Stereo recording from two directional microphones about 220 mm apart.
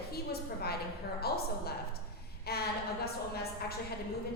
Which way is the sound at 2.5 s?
45° left (ahead or behind).